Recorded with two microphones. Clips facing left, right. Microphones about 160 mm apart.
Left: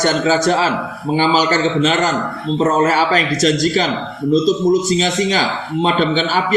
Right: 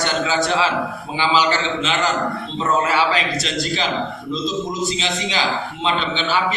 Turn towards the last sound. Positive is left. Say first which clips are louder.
# left 5 dB
turn(degrees=45)  # may be behind; listen again after turning